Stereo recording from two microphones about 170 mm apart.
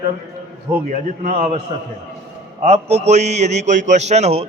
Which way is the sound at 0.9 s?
45° right (ahead or behind).